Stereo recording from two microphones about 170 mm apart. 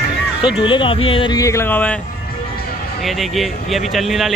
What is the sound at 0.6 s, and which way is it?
Speech, 30° left (ahead or behind).